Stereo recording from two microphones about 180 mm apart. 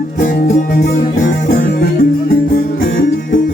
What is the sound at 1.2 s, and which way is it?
Music, 55° left (ahead or behind).